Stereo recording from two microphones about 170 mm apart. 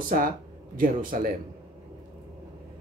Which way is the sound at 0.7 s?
55° right (ahead or behind).